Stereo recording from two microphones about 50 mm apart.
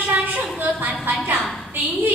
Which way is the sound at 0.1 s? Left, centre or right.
Right.